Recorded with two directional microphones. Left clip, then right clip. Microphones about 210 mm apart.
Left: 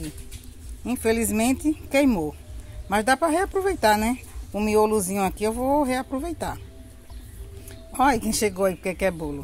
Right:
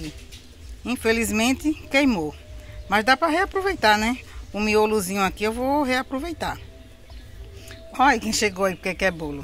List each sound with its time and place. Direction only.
0.8 s speech: 10° left (ahead or behind)
7.6 s speech: 15° left (ahead or behind)